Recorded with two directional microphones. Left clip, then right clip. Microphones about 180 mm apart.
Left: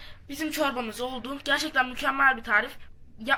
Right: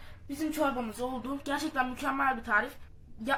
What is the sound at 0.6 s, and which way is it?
A woman's voice, 5° left (ahead or behind).